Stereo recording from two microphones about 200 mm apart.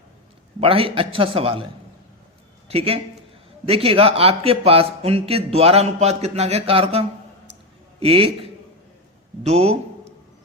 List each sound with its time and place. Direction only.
0.6 s a man's voice: 25° right (ahead or behind)
2.6 s a man's voice: 30° right (ahead or behind)
9.4 s speech: 30° right (ahead or behind)